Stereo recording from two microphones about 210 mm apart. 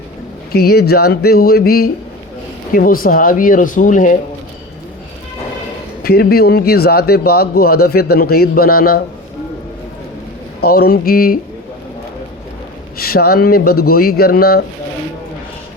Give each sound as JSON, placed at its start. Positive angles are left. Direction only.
{"t": 0.5, "sound": "speech", "side_deg": 50}
{"t": 6.0, "sound": "speech", "side_deg": 45}
{"t": 10.6, "sound": "speech", "side_deg": 45}
{"t": 13.0, "sound": "speech", "side_deg": 45}